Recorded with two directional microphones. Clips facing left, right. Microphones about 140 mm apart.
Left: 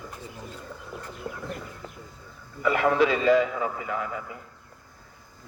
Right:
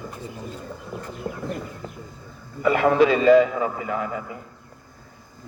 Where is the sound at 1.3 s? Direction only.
45° right (ahead or behind).